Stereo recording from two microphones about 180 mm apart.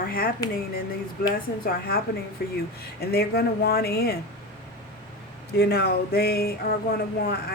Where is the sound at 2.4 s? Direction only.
60° left (ahead or behind).